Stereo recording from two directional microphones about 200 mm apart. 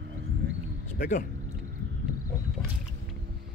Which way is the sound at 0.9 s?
40° left (ahead or behind).